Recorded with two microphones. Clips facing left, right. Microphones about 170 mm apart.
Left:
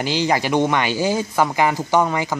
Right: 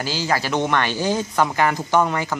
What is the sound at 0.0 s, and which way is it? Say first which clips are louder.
Speech: left 3 dB; 15° left (ahead or behind).